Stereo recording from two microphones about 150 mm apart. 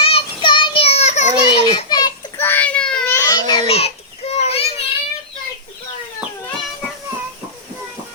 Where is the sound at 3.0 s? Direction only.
20° left (ahead or behind).